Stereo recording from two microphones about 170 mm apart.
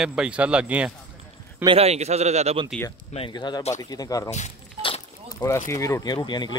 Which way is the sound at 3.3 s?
25° left (ahead or behind).